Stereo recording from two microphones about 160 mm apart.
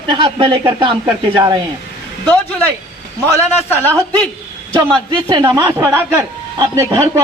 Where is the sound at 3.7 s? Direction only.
10° left (ahead or behind).